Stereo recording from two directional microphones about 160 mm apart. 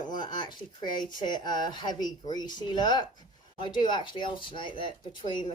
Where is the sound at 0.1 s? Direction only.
30° left (ahead or behind).